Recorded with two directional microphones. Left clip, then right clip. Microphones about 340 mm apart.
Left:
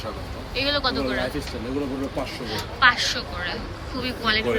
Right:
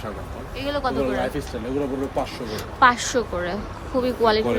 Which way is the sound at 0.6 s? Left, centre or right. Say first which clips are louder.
Even; centre.